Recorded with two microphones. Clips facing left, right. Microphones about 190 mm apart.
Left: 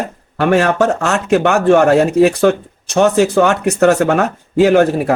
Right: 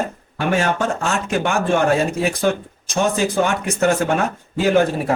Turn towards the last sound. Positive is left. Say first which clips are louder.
# left 6 dB
turn(degrees=65)  # may be behind; listen again after turning